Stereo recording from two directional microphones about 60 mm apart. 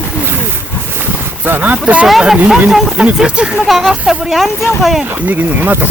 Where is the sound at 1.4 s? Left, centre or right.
Right.